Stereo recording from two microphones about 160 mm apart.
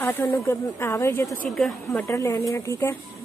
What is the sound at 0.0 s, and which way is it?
Speech, 15° left (ahead or behind).